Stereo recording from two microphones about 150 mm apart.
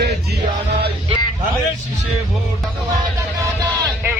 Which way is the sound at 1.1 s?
40° right (ahead or behind).